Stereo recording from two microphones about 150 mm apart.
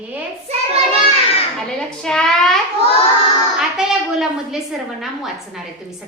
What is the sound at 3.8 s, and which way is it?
A woman's voice, centre (ahead or behind).